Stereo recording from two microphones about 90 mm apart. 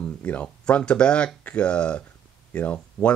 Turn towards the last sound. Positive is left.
turn(degrees=15)  # may be behind; listen again after turning